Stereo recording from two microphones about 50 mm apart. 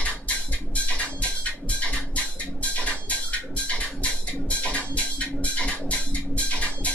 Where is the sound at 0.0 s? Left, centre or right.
Left.